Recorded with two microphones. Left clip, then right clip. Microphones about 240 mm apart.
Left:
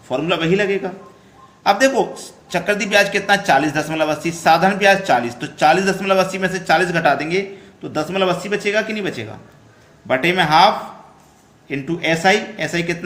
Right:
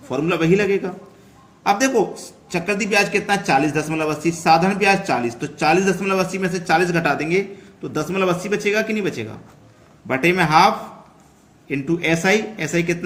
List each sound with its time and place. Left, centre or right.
0.1 s a man's voice: centre
11.7 s a man's voice: centre